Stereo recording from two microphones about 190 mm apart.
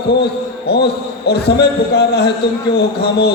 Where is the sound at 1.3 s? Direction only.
60° left (ahead or behind).